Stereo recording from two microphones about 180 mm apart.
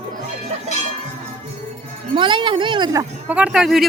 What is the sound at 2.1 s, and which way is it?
Speech, 25° right (ahead or behind).